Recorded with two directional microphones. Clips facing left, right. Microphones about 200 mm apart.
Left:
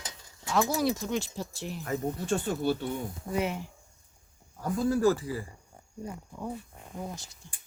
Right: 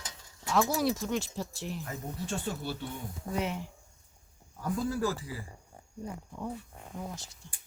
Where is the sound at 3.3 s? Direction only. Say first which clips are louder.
Left 3 dB; 5° left (ahead or behind).